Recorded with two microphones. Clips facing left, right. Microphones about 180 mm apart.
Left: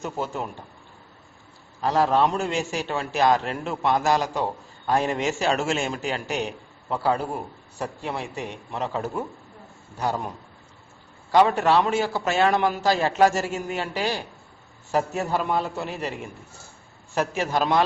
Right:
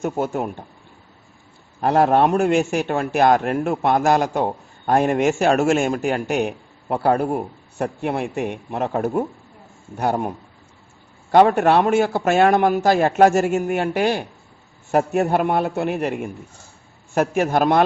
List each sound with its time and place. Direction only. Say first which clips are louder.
0.0 s a man's voice: right 7 dB; 50° right (ahead or behind)
1.8 s a man's voice: right 5 dB; 55° right (ahead or behind)